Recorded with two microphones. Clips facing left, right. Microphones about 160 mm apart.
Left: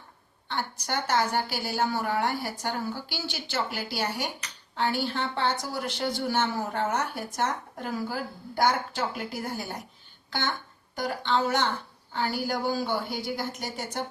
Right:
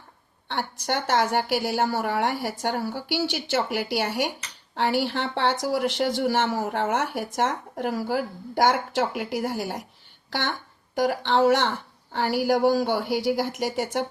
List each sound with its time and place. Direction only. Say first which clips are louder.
0.4 s a woman's voice: right 4 dB; 75° right (ahead or behind); by 14.0 s 90° right